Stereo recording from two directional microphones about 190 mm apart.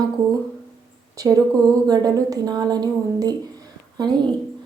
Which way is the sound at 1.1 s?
15° right (ahead or behind).